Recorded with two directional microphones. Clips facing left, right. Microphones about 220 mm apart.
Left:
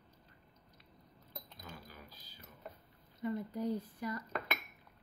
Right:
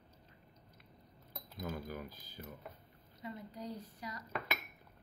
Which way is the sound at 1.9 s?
50° right (ahead or behind).